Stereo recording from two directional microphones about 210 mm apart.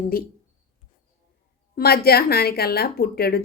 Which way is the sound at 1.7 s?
45° left (ahead or behind).